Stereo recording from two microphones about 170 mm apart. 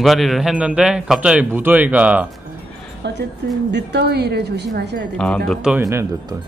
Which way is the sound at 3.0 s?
85° right.